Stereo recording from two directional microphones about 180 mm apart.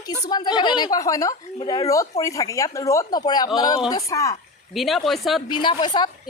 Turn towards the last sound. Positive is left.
turn(degrees=25)  # may be behind; listen again after turning